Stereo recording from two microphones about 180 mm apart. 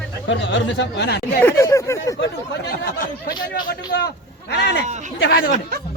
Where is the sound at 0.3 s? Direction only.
90° left; by 1.4 s 65° left (ahead or behind).